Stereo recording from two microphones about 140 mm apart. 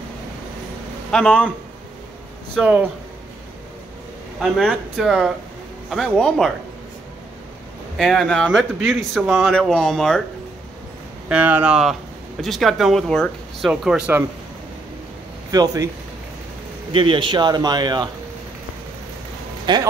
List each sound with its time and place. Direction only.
1.1 s a man's voice: 10° left (ahead or behind)
2.6 s speech: 10° right (ahead or behind)
4.4 s speech: centre (ahead or behind)
8.0 s speech: 5° left (ahead or behind)
9.3 s speech: 10° right (ahead or behind)
9.6 s speech: 5° left (ahead or behind)
11.2 s speech: 10° right (ahead or behind)
15.5 s speech: 25° right (ahead or behind)
16.9 s a man's voice: 35° right (ahead or behind)
19.6 s speech: 30° right (ahead or behind)